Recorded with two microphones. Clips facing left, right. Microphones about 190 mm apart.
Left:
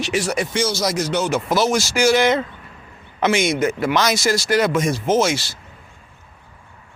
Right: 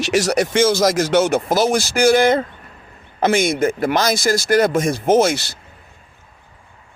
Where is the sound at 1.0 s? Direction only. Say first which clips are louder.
Right 5 dB; 85° right.